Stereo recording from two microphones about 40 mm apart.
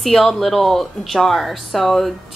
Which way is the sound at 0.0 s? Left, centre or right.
Centre.